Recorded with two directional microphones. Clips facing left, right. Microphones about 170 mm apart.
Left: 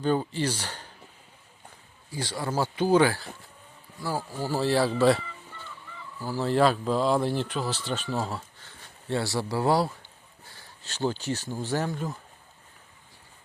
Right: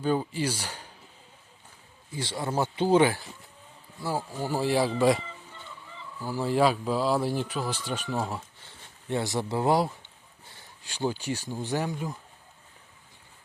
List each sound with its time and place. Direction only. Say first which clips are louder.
0.0 s speech: left 1 dB; 10° right (ahead or behind)
2.1 s speech: even; 25° right (ahead or behind)
6.4 s speech: left 1 dB; 10° right (ahead or behind)